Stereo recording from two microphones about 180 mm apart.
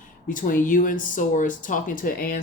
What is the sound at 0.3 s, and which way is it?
Speech, 45° left (ahead or behind).